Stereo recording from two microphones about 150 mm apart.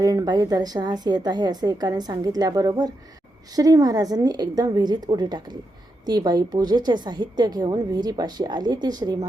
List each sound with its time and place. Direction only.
0.0 s a woman's voice: 25° right (ahead or behind)